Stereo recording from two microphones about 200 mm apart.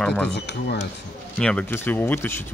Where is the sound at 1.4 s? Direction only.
5° left (ahead or behind).